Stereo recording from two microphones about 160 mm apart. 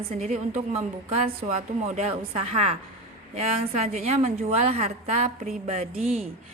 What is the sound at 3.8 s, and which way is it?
A woman's voice, 45° right (ahead or behind).